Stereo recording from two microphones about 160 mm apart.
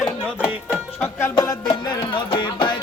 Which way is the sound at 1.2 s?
25° left (ahead or behind).